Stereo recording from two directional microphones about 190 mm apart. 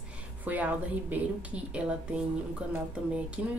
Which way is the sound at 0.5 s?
10° right (ahead or behind).